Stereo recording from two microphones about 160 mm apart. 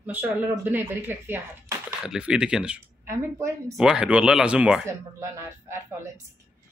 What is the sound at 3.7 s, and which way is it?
Speech, 5° right (ahead or behind).